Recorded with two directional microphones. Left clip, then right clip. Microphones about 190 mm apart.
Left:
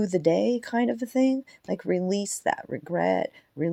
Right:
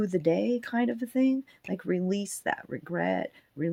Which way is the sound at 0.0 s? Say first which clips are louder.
Left 4 dB; 20° left (ahead or behind).